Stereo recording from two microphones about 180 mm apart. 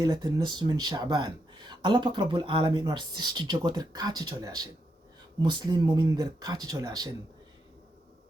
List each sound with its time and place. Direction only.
0.0 s speech: 20° right (ahead or behind)